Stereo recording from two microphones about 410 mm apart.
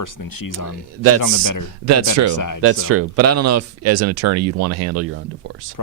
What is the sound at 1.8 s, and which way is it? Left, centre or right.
Speech, right.